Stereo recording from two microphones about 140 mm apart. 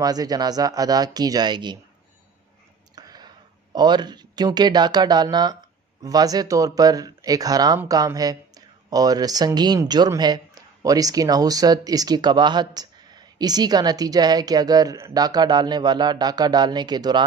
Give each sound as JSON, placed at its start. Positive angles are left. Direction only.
{"t": 0.0, "sound": "speech", "side_deg": -25}
{"t": 3.0, "sound": "a sound", "side_deg": -30}
{"t": 3.7, "sound": "speech", "side_deg": -30}